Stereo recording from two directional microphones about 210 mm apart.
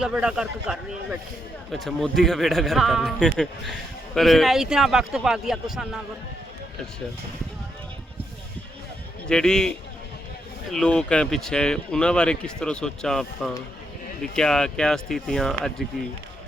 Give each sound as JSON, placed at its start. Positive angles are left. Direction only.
{"t": 0.0, "sound": "speech", "side_deg": -5}
{"t": 9.2, "sound": "speech", "side_deg": 5}